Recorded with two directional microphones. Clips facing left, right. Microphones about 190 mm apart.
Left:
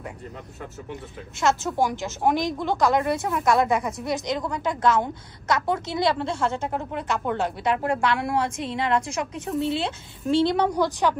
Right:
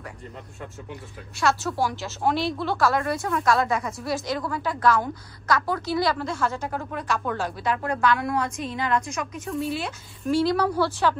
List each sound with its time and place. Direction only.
1.4 s a woman's voice: 20° left (ahead or behind)